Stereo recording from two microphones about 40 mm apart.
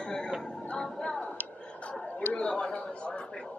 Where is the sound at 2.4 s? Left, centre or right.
Left.